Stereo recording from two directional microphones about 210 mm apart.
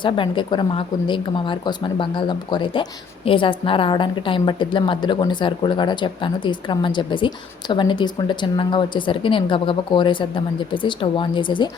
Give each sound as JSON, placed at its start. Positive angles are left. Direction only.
{"t": 0.0, "sound": "a woman's voice", "side_deg": 20}